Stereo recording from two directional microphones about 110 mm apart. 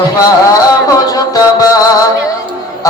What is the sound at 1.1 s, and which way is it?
Music, 35° left (ahead or behind).